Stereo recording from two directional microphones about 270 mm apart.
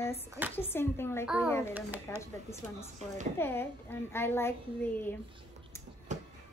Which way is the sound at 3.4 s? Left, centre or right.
Centre.